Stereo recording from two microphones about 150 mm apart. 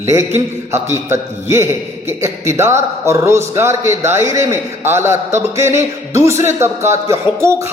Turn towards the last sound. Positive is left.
turn(degrees=-20)  # may be behind; listen again after turning